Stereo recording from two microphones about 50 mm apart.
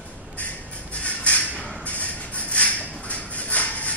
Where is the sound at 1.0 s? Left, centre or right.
Left.